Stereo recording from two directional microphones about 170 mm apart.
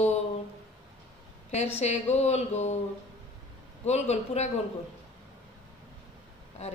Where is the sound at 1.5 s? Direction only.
40° left (ahead or behind).